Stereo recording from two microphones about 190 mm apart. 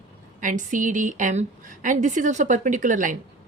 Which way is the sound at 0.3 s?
45° right (ahead or behind).